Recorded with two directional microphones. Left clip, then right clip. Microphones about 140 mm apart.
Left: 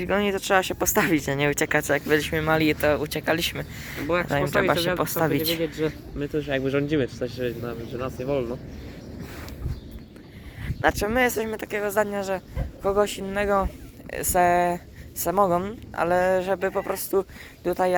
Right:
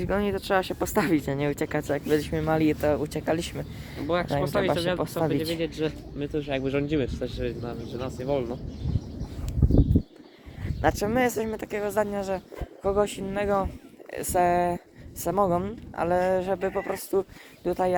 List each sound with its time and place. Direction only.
0.0 s speech: 5° left (ahead or behind); by 4.1 s 15° right (ahead or behind)
4.1 s speech: 25° left (ahead or behind)
5.2 s speech: 5° right (ahead or behind)
5.6 s speech: 30° left (ahead or behind); by 8.5 s 45° left (ahead or behind)
10.8 s speech: 15° right (ahead or behind)